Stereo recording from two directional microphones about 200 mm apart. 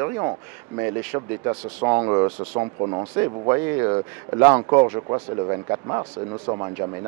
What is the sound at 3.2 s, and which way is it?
Speech, 15° right (ahead or behind).